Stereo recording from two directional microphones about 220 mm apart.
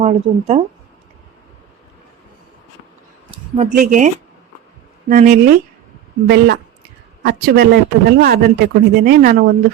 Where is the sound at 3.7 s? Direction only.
40° right (ahead or behind).